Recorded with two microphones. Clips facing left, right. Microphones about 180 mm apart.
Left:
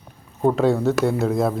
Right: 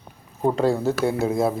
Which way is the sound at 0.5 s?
Centre (ahead or behind).